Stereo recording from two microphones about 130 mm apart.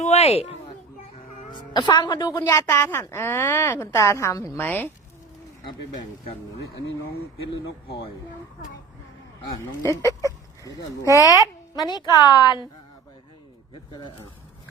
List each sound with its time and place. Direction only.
0.0 s a sound: 55° left (ahead or behind)
1.5 s a woman's voice: 35° left (ahead or behind); by 4.9 s 15° left (ahead or behind)
9.8 s a woman's voice: 25° left (ahead or behind)
10.7 s speech: 25° right (ahead or behind)
12.1 s speech: 30° left (ahead or behind)
13.9 s speech: 40° left (ahead or behind)